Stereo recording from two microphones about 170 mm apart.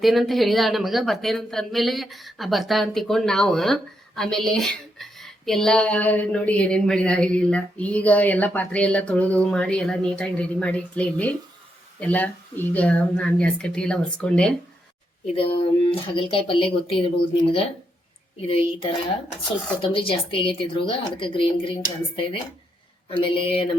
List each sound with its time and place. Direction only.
0.0 s speech: centre (ahead or behind)
15.4 s speech: 35° left (ahead or behind)